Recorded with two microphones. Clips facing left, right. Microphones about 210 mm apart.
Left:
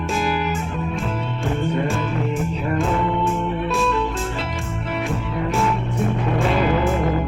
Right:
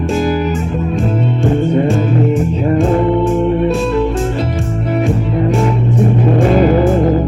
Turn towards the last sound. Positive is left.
turn(degrees=-40)  # may be behind; listen again after turning